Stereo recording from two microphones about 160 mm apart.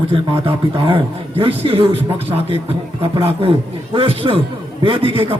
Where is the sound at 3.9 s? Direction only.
35° right (ahead or behind).